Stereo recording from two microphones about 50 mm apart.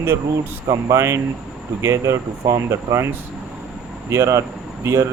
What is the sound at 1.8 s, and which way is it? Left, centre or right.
Speech, right.